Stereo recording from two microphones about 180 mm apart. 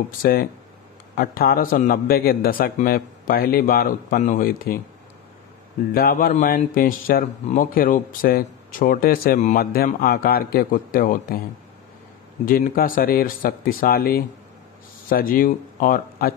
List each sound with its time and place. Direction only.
0.2 s a man's voice: 55° left (ahead or behind)
5.9 s a man's voice: 55° left (ahead or behind)
12.4 s a man's voice: 50° left (ahead or behind)